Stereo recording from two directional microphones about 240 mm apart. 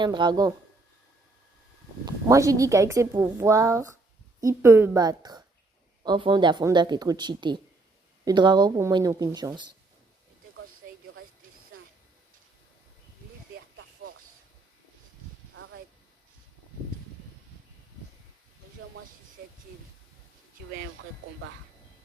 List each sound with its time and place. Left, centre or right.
0.0 s a woman's voice: centre
2.0 s a woman's voice: centre